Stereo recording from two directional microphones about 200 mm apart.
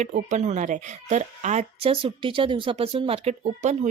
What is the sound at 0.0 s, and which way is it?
Speech, 35° right (ahead or behind).